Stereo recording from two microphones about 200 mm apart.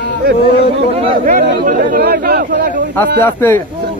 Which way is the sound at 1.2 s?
45° right (ahead or behind).